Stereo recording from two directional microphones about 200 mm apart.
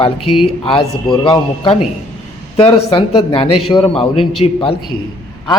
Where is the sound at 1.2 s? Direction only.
25° left (ahead or behind).